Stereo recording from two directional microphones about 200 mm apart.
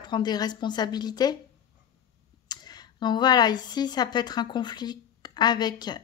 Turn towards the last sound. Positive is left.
turn(degrees=20)  # may be behind; listen again after turning